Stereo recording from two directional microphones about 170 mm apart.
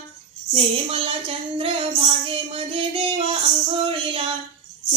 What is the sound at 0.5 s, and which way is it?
Speech, 35° right (ahead or behind).